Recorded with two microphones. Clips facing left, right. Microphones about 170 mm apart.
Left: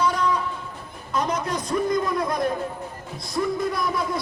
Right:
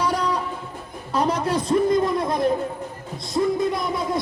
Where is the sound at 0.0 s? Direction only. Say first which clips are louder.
Even; 35° right (ahead or behind).